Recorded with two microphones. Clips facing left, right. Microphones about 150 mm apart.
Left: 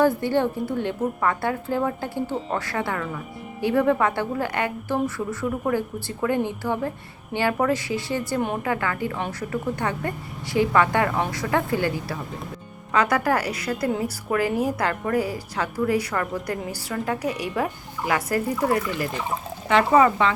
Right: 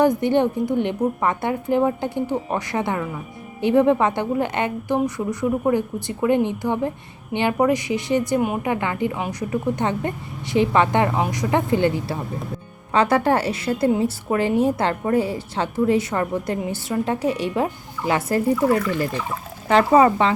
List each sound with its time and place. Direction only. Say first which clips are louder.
0.0 s a woman's voice: right 3 dB; 20° right (ahead or behind)